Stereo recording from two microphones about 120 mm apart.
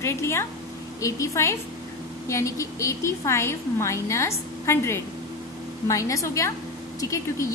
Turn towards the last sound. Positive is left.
turn(degrees=25)  # may be behind; listen again after turning